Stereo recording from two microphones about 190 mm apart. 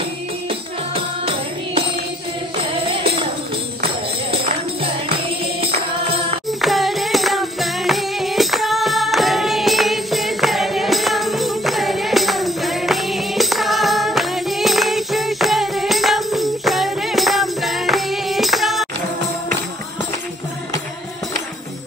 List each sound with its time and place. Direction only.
0.5 s music: 30° right (ahead or behind)
4.8 s music: 30° right (ahead or behind)
6.6 s music: centre (ahead or behind)